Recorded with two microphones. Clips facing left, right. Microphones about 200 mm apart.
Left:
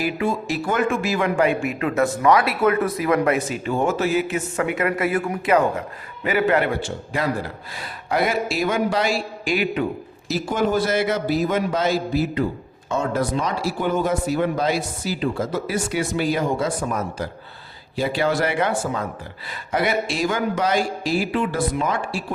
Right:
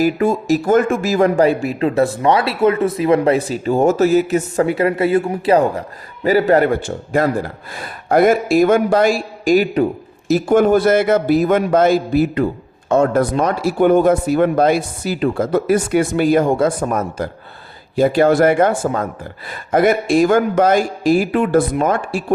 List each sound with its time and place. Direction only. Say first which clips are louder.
0.0 s a man's voice: right 7 dB; 45° right (ahead or behind)
10.2 s a man's voice: right 9 dB; 55° right (ahead or behind)